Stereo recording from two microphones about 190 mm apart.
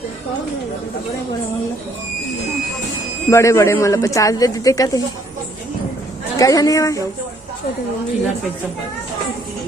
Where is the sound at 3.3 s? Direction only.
15° left (ahead or behind).